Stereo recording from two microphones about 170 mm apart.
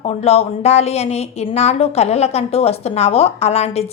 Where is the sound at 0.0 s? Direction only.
35° left (ahead or behind).